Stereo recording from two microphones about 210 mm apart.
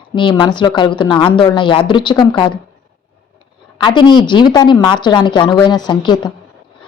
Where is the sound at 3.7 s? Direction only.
20° left (ahead or behind).